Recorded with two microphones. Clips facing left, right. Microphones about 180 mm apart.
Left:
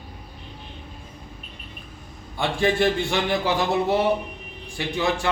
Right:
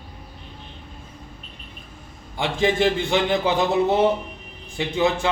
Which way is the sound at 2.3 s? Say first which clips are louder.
Right 1 dB; 20° right (ahead or behind).